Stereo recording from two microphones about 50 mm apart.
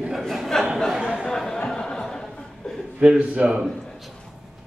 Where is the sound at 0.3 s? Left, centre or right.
Centre.